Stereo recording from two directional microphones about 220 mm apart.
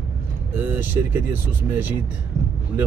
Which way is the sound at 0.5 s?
10° right (ahead or behind).